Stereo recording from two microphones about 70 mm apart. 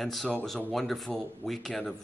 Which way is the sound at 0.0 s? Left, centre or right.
Centre.